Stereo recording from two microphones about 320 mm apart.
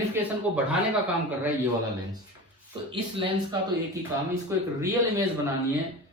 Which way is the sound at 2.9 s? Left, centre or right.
Centre.